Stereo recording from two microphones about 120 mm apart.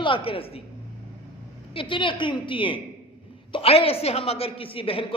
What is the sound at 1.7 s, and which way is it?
A man's voice, 45° left (ahead or behind).